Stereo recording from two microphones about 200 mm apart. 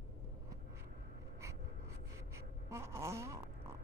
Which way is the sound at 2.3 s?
10° right (ahead or behind).